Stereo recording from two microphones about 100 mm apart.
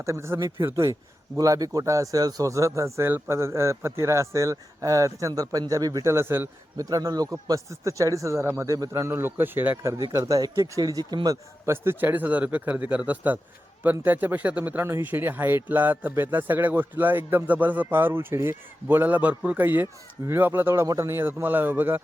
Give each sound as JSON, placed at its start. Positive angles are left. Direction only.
{"t": 0.0, "sound": "a man's voice", "side_deg": -30}
{"t": 6.7, "sound": "a man's voice", "side_deg": -35}
{"t": 10.0, "sound": "a man's voice", "side_deg": -35}
{"t": 11.6, "sound": "a man's voice", "side_deg": -25}